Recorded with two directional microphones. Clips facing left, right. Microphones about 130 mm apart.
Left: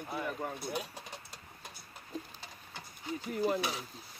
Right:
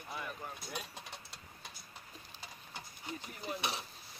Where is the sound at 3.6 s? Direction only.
25° right (ahead or behind).